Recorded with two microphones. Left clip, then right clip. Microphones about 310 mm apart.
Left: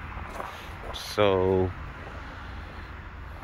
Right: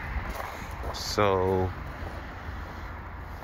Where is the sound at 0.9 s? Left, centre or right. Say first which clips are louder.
Right 2 dB; left.